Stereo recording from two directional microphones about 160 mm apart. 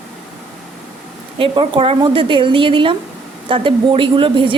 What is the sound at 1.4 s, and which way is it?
A woman's voice, 35° right (ahead or behind).